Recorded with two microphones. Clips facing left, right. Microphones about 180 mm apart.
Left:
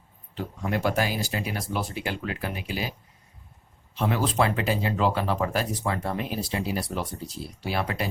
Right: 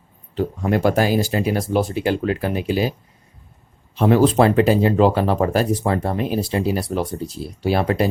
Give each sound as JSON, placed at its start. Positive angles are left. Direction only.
{"t": 0.6, "sound": "speech", "side_deg": -50}
{"t": 3.9, "sound": "speech", "side_deg": -45}